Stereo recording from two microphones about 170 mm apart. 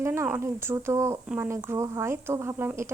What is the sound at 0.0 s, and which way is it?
A woman's voice, 15° right (ahead or behind).